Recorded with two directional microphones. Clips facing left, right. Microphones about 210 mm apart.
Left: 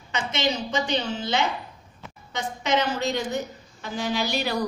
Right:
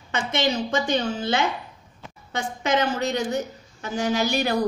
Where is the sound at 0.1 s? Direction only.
50° right (ahead or behind).